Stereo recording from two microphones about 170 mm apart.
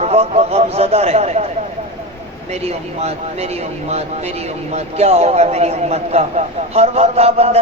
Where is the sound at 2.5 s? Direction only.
40° right (ahead or behind).